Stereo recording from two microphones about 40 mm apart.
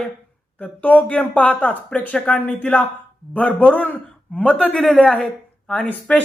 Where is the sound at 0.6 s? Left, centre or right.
Left.